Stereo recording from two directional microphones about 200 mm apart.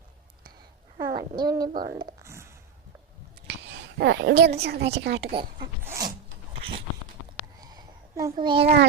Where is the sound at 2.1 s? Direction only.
15° right (ahead or behind).